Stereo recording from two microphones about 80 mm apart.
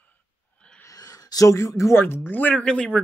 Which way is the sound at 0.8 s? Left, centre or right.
Left.